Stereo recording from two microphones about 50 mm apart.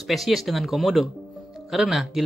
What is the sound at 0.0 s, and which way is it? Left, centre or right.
Speech, centre.